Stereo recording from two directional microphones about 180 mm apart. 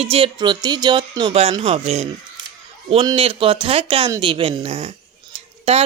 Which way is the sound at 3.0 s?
30° right (ahead or behind).